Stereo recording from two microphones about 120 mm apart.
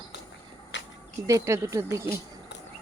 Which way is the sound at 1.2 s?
25° right (ahead or behind).